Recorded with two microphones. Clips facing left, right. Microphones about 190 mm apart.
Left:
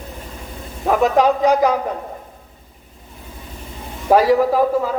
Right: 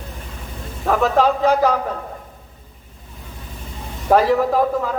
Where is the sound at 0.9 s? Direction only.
15° left (ahead or behind).